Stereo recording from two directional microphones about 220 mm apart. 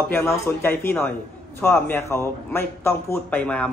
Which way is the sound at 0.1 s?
10° left (ahead or behind).